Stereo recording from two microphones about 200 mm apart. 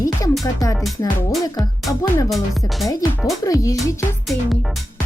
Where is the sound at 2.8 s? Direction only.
20° left (ahead or behind).